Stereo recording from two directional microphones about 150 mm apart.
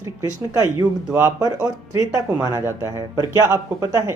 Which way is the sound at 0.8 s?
20° right (ahead or behind).